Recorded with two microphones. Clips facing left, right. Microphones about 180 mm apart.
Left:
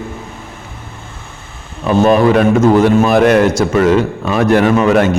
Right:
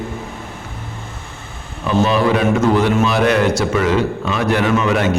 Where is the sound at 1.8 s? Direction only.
50° left (ahead or behind).